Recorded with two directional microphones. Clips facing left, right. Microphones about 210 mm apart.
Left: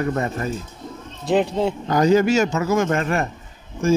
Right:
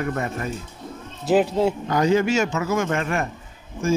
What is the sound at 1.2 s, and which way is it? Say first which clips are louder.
Speech: right 1 dB; 5° right (ahead or behind).